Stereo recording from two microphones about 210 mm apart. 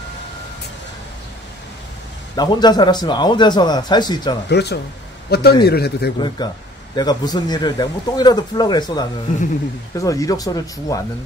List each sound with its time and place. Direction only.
2.3 s speech: 20° left (ahead or behind)
4.5 s a man's voice: 55° left (ahead or behind)
6.2 s speech: 20° left (ahead or behind)